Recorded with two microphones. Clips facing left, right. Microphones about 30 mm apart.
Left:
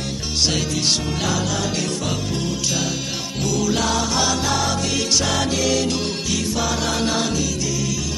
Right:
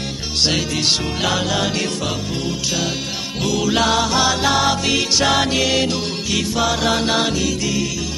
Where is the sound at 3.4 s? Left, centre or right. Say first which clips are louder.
Right 3 dB; right.